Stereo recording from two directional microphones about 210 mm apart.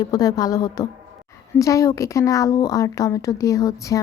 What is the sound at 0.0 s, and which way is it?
A woman's voice, 20° left (ahead or behind).